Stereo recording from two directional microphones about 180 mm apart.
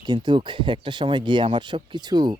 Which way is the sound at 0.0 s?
20° right (ahead or behind).